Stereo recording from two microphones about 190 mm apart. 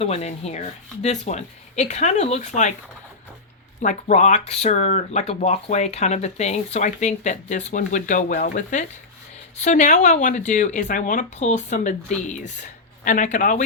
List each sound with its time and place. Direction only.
0.0 s speech: 35° left (ahead or behind)
3.8 s speech: 40° left (ahead or behind)